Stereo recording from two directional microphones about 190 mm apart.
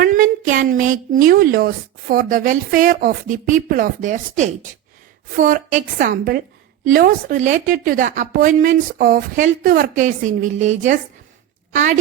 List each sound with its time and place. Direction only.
0.0 s a woman's voice: 45° right (ahead or behind)